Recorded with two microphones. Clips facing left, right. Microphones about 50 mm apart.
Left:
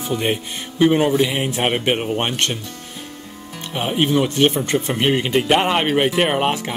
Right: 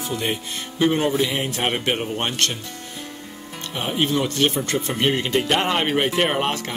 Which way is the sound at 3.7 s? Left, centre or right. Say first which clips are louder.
Left 4 dB; centre.